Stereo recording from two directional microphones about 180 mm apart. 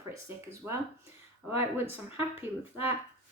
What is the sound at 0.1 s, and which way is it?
Speech, 15° right (ahead or behind).